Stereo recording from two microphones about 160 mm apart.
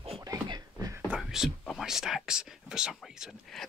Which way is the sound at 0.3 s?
20° right (ahead or behind).